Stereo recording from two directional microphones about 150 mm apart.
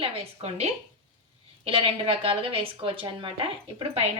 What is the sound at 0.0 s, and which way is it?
A woman's voice, 45° right (ahead or behind).